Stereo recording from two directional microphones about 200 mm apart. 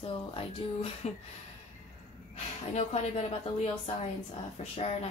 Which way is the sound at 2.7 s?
35° left (ahead or behind).